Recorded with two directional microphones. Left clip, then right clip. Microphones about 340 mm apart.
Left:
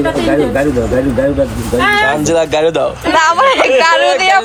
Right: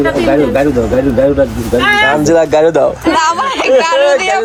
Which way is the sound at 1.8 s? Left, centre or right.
Centre.